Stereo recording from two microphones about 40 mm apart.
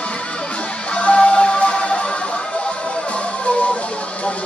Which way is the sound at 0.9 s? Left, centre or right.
Left.